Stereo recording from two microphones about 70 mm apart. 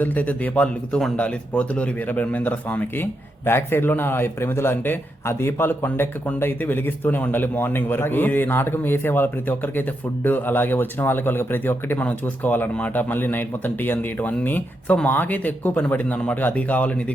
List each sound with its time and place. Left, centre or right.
0.0 s speech: left